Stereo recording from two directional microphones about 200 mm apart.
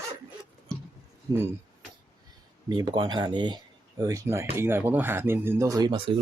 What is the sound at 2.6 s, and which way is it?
Speech, 20° right (ahead or behind).